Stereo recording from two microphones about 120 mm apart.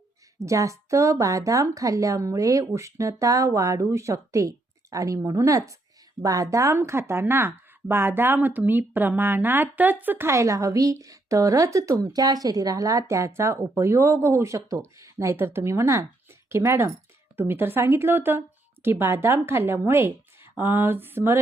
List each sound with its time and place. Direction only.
0.3 s speech: 25° right (ahead or behind)